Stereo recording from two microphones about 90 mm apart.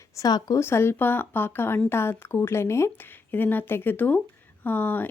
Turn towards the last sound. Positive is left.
turn(degrees=20)  # may be behind; listen again after turning